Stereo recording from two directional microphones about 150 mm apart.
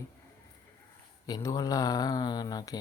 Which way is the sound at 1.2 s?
25° left (ahead or behind).